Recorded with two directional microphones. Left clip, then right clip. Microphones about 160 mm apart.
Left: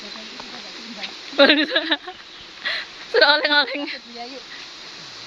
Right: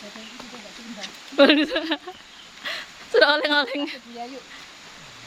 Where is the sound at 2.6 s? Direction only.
20° right (ahead or behind).